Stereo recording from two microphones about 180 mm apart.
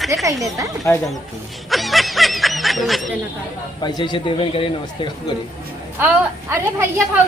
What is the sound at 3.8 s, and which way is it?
Speech, 25° left (ahead or behind).